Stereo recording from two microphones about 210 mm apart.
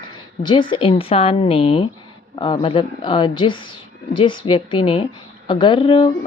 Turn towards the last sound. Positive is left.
turn(degrees=25)  # may be behind; listen again after turning